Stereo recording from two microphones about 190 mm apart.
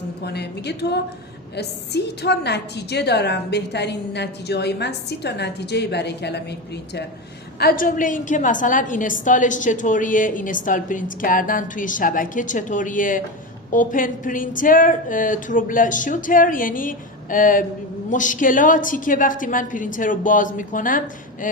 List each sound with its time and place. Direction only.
0.3 s a woman's voice: 60° left (ahead or behind)
7.6 s a woman's voice: 50° left (ahead or behind)